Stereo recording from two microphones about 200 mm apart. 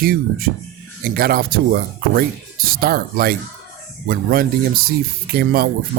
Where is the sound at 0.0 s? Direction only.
45° right (ahead or behind).